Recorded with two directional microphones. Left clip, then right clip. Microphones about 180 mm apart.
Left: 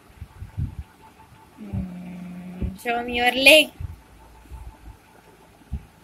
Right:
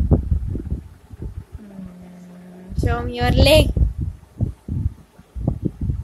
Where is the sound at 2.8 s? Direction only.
25° right (ahead or behind).